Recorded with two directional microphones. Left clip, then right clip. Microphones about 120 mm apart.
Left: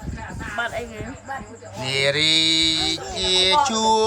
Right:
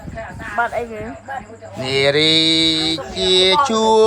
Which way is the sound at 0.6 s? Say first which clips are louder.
Right 7 dB; 20° right (ahead or behind).